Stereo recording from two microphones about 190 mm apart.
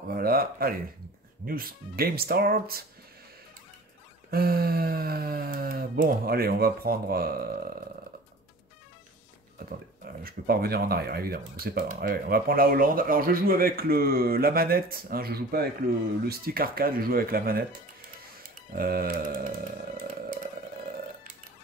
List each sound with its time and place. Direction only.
0.1 s a sound: 50° right (ahead or behind)
1.4 s speech: 50° right (ahead or behind)
4.3 s speech: 50° right (ahead or behind)
10.2 s speech: 55° right (ahead or behind)
18.8 s speech: 50° right (ahead or behind)